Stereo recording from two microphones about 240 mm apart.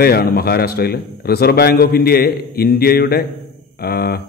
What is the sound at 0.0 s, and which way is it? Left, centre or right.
A man's voice, left.